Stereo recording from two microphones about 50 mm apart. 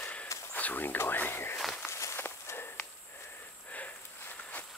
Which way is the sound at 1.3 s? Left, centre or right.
Left.